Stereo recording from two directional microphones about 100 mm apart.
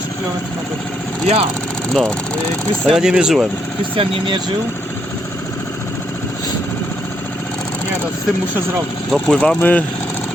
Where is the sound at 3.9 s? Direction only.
55° right (ahead or behind).